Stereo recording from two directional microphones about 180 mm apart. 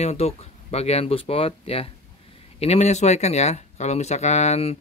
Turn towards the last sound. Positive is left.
turn(degrees=35)  # may be behind; listen again after turning